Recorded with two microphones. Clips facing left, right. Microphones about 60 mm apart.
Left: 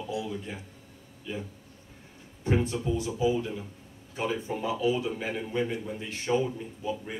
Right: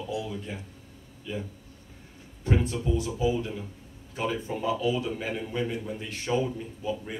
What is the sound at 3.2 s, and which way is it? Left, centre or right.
Speech, centre.